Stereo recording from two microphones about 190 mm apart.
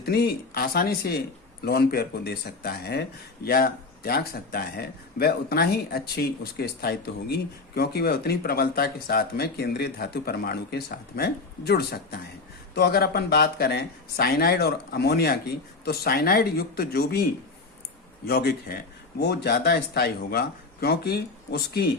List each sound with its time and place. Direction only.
0.0 s speech: 55° left (ahead or behind)
18.3 s speech: 55° left (ahead or behind)